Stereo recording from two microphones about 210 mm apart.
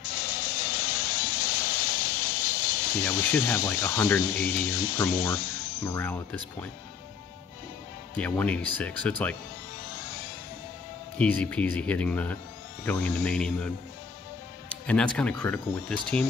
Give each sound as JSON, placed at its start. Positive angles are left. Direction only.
{"t": 0.1, "sound": "vehicle", "side_deg": 45}
{"t": 3.1, "sound": "speech", "side_deg": 10}
{"t": 4.2, "sound": "speech", "side_deg": 45}
{"t": 5.9, "sound": "speech", "side_deg": 10}
{"t": 8.2, "sound": "speech", "side_deg": 5}
{"t": 11.1, "sound": "speech", "side_deg": 5}
{"t": 14.7, "sound": "speech", "side_deg": 5}